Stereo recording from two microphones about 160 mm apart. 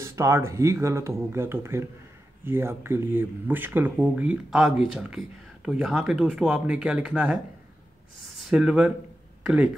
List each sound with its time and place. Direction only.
0.0 s speech: 20° right (ahead or behind)
8.5 s speech: 5° right (ahead or behind)